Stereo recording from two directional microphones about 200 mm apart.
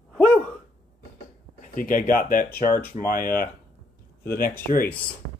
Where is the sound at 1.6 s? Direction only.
40° left (ahead or behind).